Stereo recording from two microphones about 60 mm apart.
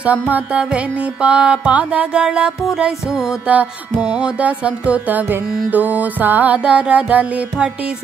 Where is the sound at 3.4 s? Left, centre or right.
Right.